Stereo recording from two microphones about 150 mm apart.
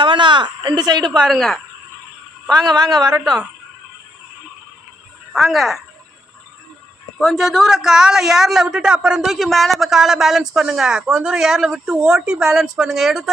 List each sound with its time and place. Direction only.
0.0 s a sound: 30° right (ahead or behind)
1.2 s a man's voice: centre (ahead or behind)
2.5 s speech: 25° right (ahead or behind)
5.3 s a man's voice: centre (ahead or behind)
7.2 s a man's voice: centre (ahead or behind)